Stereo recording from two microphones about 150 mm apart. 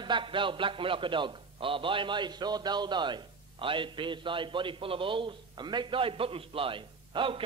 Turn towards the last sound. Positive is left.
turn(degrees=-35)  # may be behind; listen again after turning